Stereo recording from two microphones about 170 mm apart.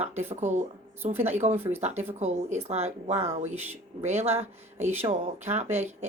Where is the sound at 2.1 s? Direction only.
40° right (ahead or behind).